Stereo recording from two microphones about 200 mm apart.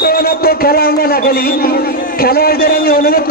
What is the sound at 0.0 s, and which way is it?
A man's voice, 50° left (ahead or behind).